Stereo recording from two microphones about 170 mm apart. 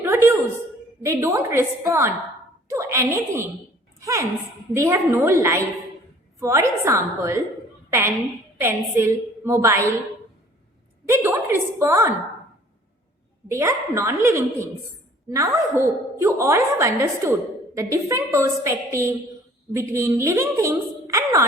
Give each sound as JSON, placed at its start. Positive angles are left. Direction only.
{"t": 0.0, "sound": "a sound", "side_deg": -15}
{"t": 1.0, "sound": "a woman's voice", "side_deg": -15}
{"t": 8.6, "sound": "a woman's voice", "side_deg": -15}
{"t": 11.1, "sound": "a woman's voice", "side_deg": -15}
{"t": 13.5, "sound": "a woman's voice", "side_deg": -15}